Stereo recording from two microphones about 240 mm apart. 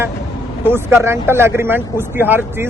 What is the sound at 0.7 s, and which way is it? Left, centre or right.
Speech, centre.